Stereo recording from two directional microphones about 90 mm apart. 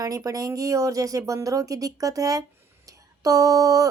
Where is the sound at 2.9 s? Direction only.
40° right (ahead or behind).